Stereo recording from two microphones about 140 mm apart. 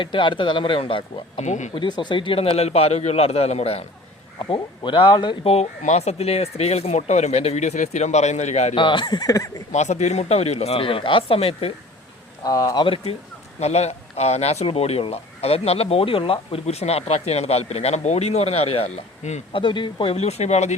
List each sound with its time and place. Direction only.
0.0 s speech: 35° left (ahead or behind)
1.4 s speech: 60° left (ahead or behind)
1.7 s speech: 35° left (ahead or behind); by 3.8 s 50° left (ahead or behind)
4.4 s speech: 35° left (ahead or behind)
5.5 s speech: 50° left (ahead or behind)
8.7 s speech: 35° left (ahead or behind)
9.7 s speech: 55° left (ahead or behind)
12.4 s speech: 25° left (ahead or behind)
13.6 s speech: 50° left (ahead or behind)
19.5 s speech: 35° left (ahead or behind); by 20.7 s 50° left (ahead or behind)